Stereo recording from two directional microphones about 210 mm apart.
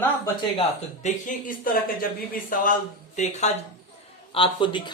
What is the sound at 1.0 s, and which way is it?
Speech, 40° left (ahead or behind).